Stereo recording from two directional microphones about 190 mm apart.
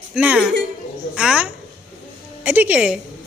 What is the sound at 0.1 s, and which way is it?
A man's voice, 5° right (ahead or behind).